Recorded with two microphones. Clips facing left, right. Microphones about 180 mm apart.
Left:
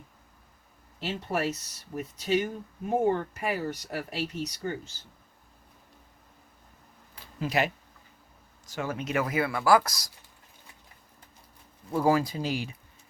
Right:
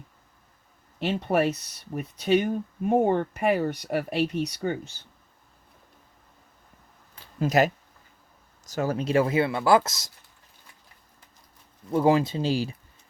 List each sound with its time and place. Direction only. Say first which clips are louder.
0.9 s speech: right 7 dB; 60° right (ahead or behind)
7.3 s speech: right 6 dB; 45° right (ahead or behind); by 10.1 s 25° right (ahead or behind)
11.9 s speech: right 3 dB; 20° right (ahead or behind)